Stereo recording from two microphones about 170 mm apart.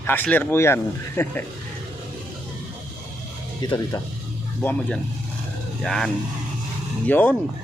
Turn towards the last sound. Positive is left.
turn(degrees=10)  # may be behind; listen again after turning